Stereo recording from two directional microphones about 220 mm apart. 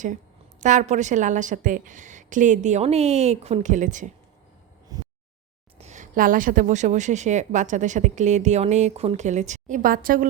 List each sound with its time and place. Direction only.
0.6 s speech: 35° right (ahead or behind)
5.7 s speech: 30° right (ahead or behind)